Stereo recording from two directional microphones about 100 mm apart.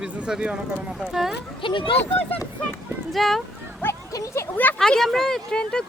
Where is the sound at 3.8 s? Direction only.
30° left (ahead or behind).